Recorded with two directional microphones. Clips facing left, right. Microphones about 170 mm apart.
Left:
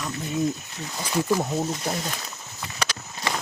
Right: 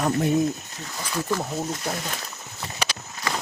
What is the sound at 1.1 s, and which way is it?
Speech, 10° left (ahead or behind).